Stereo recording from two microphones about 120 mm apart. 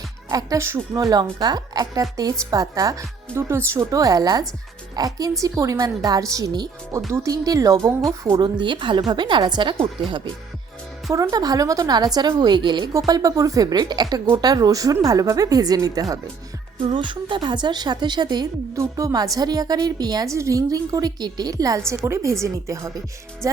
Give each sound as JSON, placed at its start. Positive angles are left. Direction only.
{"t": 0.3, "sound": "a woman's voice", "side_deg": -25}
{"t": 11.1, "sound": "a woman's voice", "side_deg": -25}
{"t": 16.8, "sound": "a woman's voice", "side_deg": -40}